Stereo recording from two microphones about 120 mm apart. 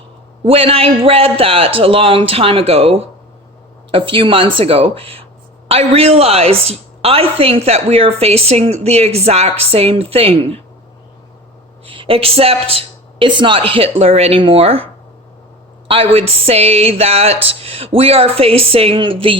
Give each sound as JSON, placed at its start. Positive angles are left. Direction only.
{"t": 0.4, "sound": "a woman's voice", "side_deg": -50}
{"t": 11.9, "sound": "a woman's voice", "side_deg": -50}
{"t": 15.9, "sound": "speech", "side_deg": -50}